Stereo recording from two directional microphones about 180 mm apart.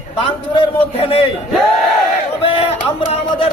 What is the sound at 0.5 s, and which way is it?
Speech, 30° left (ahead or behind).